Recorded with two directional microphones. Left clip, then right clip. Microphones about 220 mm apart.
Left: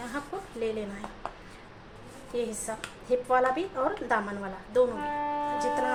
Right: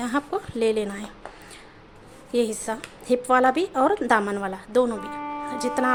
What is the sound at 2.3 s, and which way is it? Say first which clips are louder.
Speech: right 8 dB; 50° right (ahead or behind).